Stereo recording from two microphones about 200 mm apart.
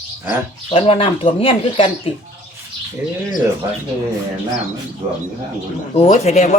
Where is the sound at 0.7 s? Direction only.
25° left (ahead or behind).